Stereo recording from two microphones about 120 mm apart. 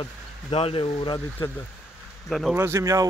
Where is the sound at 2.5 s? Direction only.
20° right (ahead or behind).